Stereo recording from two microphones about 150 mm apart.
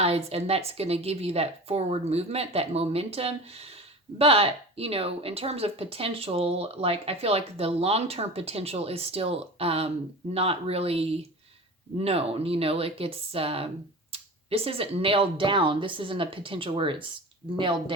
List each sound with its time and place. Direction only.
0.0 s a woman's voice: 45° right (ahead or behind)